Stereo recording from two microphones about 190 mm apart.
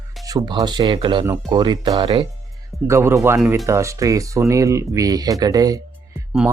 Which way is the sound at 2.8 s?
15° right (ahead or behind).